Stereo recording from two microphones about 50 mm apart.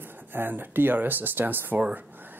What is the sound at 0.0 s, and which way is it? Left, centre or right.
Speech, right.